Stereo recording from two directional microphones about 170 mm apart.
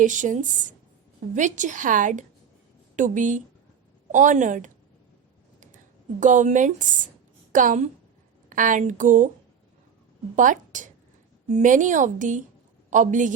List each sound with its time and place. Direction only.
0.0 s a woman's voice: 50° right (ahead or behind)
6.1 s a woman's voice: 50° right (ahead or behind)
10.3 s a woman's voice: 50° right (ahead or behind)